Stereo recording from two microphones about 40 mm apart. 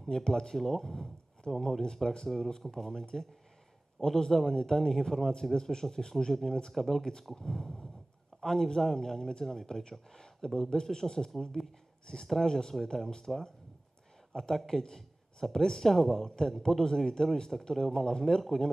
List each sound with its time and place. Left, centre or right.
0.0 s a man's voice: centre